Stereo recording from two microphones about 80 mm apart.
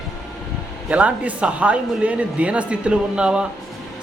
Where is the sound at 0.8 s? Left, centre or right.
Centre.